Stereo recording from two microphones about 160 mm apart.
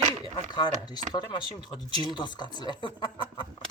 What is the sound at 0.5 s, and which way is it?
Speech, 25° left (ahead or behind).